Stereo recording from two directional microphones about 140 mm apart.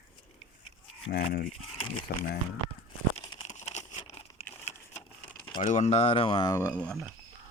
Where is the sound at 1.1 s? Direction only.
90° left.